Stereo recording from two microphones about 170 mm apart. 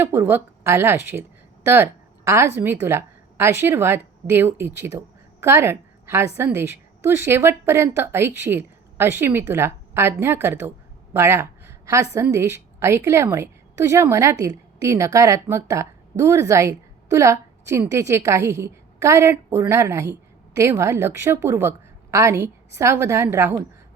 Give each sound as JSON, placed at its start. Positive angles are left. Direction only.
{"t": 0.0, "sound": "a woman's voice", "side_deg": -15}